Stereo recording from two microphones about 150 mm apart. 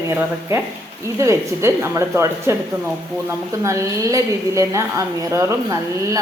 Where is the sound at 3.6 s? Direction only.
20° right (ahead or behind).